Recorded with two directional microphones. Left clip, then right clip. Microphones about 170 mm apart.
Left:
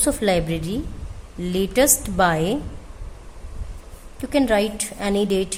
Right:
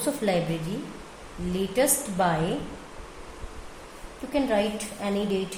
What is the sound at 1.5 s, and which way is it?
Speech, 45° left (ahead or behind).